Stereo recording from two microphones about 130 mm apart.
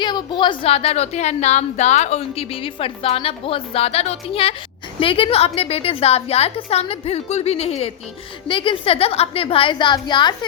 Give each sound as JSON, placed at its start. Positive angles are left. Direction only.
{"t": 0.0, "sound": "a woman's voice", "side_deg": 35}
{"t": 8.4, "sound": "a woman's voice", "side_deg": 40}